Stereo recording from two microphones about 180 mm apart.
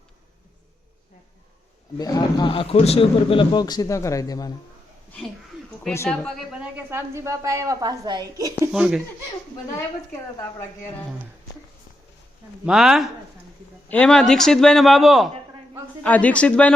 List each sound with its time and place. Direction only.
2.0 s speech: 20° left (ahead or behind)
6.1 s a woman's voice: 5° left (ahead or behind); by 8.7 s 20° right (ahead or behind)
8.7 s a man's voice: 5° right (ahead or behind)
10.1 s speech: 15° left (ahead or behind)
12.6 s a man's voice: 5° right (ahead or behind)